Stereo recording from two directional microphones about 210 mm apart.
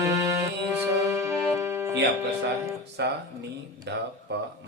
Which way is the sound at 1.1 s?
15° right (ahead or behind).